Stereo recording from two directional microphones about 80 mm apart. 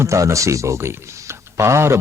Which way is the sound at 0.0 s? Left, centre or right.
Right.